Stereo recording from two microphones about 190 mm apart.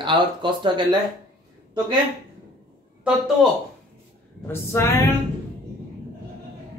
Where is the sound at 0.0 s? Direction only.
25° right (ahead or behind).